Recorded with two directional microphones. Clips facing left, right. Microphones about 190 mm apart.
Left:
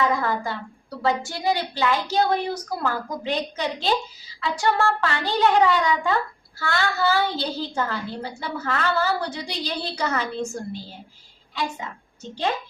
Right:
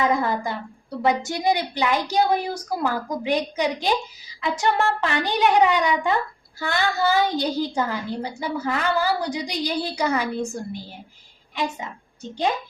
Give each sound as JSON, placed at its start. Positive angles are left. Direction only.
{"t": 0.0, "sound": "a woman's voice", "side_deg": -20}